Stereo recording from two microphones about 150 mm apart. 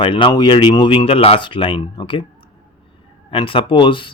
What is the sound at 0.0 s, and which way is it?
Speech, 35° left (ahead or behind).